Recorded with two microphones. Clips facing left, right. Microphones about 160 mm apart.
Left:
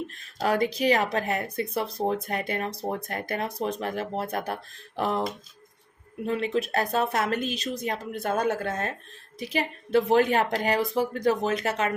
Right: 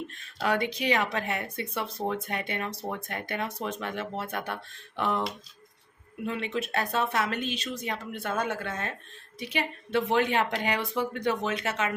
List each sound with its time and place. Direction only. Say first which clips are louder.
0.2 s speech: left 3 dB; 40° left (ahead or behind)